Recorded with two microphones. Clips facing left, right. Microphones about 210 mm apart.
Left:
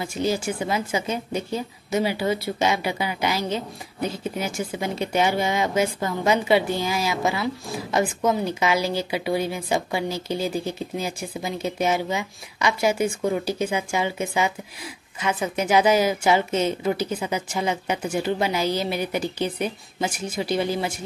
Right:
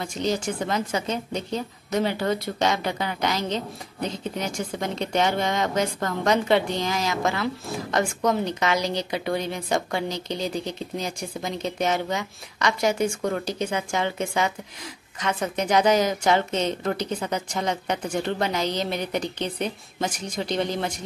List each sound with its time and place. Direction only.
0.0 s a woman's voice: 5° left (ahead or behind)